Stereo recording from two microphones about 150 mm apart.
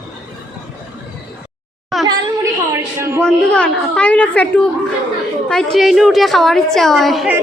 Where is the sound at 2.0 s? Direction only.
20° right (ahead or behind).